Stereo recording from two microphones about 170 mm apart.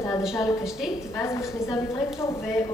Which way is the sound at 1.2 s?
20° left (ahead or behind).